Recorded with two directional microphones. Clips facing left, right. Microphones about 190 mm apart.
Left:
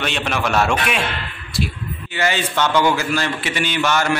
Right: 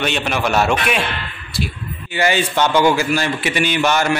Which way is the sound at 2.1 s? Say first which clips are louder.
Right 3 dB; 15° right (ahead or behind).